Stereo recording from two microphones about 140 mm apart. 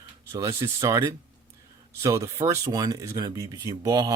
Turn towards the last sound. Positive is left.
turn(degrees=-25)  # may be behind; listen again after turning